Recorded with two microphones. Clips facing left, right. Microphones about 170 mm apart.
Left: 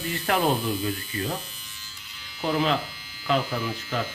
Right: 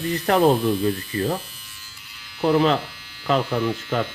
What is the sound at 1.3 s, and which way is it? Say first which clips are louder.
Electric shaver: right 3 dB; 5° right (ahead or behind).